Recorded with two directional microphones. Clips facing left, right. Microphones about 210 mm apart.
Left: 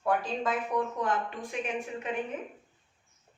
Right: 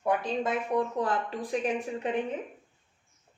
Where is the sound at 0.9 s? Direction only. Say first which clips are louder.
Right 2 dB; 35° right (ahead or behind).